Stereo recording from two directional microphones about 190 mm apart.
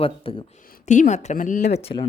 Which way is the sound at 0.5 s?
45° left (ahead or behind).